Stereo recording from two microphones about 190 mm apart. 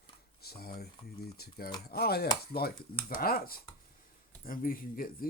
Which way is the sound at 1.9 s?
55° left (ahead or behind).